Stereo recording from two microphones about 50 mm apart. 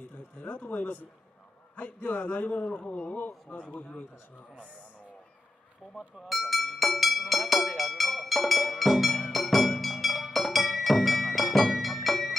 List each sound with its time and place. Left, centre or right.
0.4 s a man's voice: left
5.9 s a sound: centre
9.3 s music: centre